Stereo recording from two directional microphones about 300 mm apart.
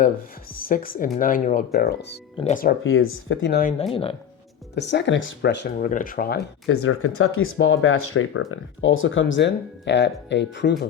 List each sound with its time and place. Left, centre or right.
0.5 s speech: left
2.8 s speech: left
6.7 s speech: left